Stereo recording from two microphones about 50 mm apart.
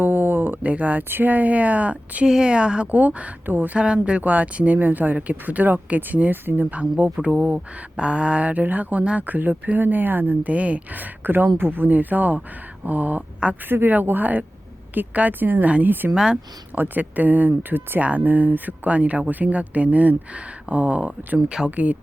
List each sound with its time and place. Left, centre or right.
0.0 s a sound: right
0.7 s speech: right
2.2 s speech: centre
3.4 s speech: right
3.8 s speech: right
6.7 s speech: right
10.5 s speech: right
13.7 s speech: right
16.1 s speech: centre
16.7 s speech: right